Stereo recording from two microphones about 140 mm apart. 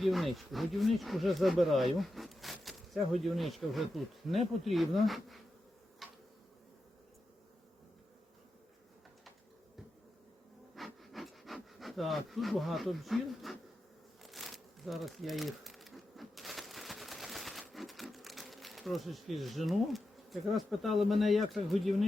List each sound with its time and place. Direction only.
0.0 s speech: centre (ahead or behind)
6.0 s insect: centre (ahead or behind)
10.8 s pant: centre (ahead or behind)
14.2 s crumpling: centre (ahead or behind)